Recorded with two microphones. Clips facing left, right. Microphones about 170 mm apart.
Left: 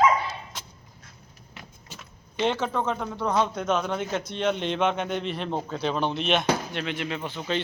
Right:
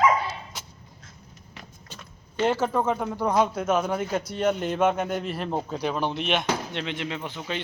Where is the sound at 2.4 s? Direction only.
10° right (ahead or behind).